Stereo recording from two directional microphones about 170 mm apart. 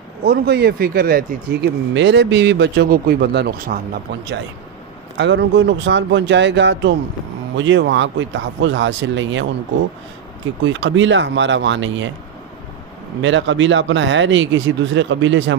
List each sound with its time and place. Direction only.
0.2 s speech: 70° right (ahead or behind)
5.1 s speech: 90° right
10.7 s speech: 90° right
13.2 s speech: 90° right